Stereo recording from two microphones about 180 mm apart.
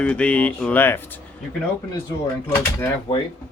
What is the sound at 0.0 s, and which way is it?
Speech, 5° left (ahead or behind).